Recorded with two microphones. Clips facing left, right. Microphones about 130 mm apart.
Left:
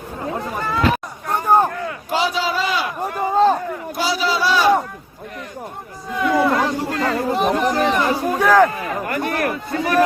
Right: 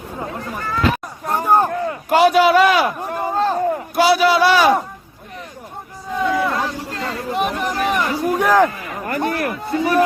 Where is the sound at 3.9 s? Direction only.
65° right (ahead or behind).